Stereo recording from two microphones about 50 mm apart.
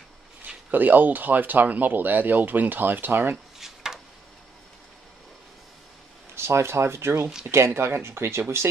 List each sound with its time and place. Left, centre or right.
0.7 s speech: right
3.5 s a sound: centre
6.3 s speech: right